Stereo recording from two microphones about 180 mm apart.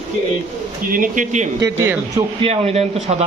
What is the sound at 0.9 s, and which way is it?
Speech, 50° right (ahead or behind).